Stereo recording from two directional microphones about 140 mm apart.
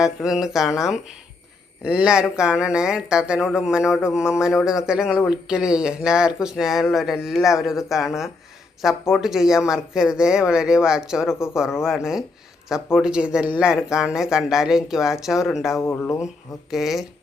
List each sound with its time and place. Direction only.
0.0 s speech: 5° right (ahead or behind)
1.8 s speech: 5° right (ahead or behind)
11.3 s speech: 20° left (ahead or behind)
11.8 s speech: 5° right (ahead or behind)
15.8 s speech: 15° left (ahead or behind)
16.7 s speech: centre (ahead or behind)